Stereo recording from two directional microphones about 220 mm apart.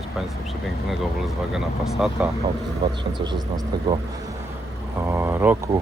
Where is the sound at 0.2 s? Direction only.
Centre (ahead or behind).